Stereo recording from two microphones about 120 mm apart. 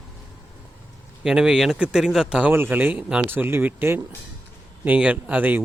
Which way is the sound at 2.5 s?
15° right (ahead or behind).